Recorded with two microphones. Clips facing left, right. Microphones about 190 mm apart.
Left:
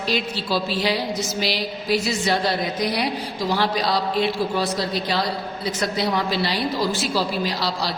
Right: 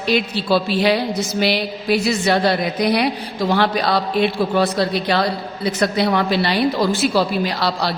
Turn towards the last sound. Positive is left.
turn(degrees=-60)  # may be behind; listen again after turning